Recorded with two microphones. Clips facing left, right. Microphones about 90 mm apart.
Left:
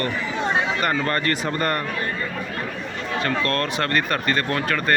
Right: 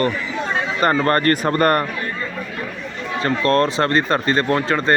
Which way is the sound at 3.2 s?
30° right (ahead or behind).